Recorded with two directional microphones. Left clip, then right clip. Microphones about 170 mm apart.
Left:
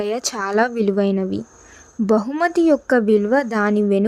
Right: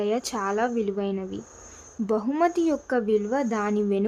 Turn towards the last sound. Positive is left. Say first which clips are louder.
# left 7 dB
turn(degrees=35)  # may be behind; listen again after turning